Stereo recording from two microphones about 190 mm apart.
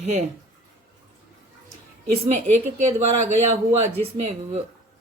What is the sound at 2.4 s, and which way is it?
Speech, 40° right (ahead or behind).